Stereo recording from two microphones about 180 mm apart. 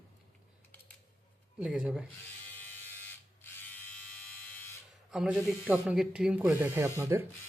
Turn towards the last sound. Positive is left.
turn(degrees=-15)  # may be behind; listen again after turning